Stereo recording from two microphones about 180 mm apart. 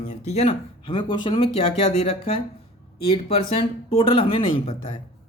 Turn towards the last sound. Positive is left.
turn(degrees=30)  # may be behind; listen again after turning